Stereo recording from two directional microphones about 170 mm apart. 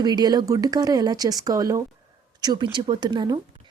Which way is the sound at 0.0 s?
25° right (ahead or behind).